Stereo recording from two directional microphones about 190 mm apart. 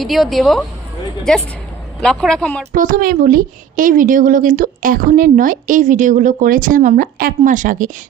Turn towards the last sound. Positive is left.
turn(degrees=-45)  # may be behind; listen again after turning